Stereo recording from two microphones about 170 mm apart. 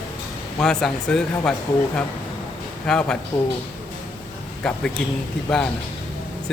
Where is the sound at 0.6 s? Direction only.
5° left (ahead or behind).